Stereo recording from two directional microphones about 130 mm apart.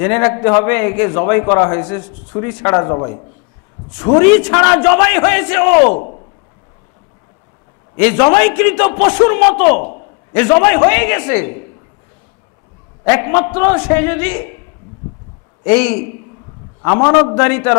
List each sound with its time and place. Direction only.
0.0 s a man's voice: 20° left (ahead or behind)
7.9 s a man's voice: 20° left (ahead or behind)
13.1 s a man's voice: 20° left (ahead or behind)
15.6 s a man's voice: 15° left (ahead or behind)